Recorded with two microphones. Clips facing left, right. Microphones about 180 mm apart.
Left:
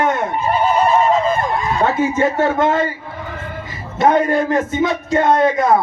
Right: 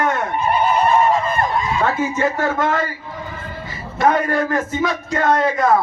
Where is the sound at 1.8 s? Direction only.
25° left (ahead or behind).